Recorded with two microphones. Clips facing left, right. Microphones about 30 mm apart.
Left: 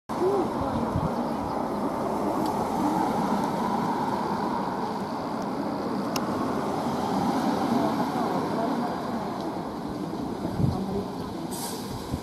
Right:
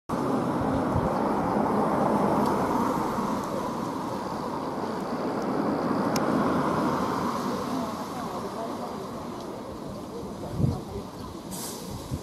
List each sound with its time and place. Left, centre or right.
2.7 s vehicle: centre; by 4.2 s left
6.8 s vehicle: centre; by 8.5 s left